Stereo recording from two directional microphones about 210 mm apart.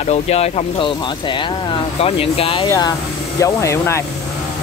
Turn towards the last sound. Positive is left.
turn(degrees=15)  # may be behind; listen again after turning